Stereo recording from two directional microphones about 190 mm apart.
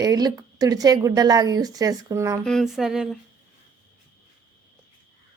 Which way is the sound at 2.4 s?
Centre (ahead or behind).